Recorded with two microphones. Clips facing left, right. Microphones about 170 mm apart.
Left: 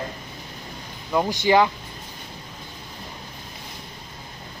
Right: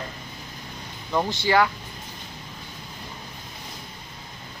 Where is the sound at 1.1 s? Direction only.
15° left (ahead or behind).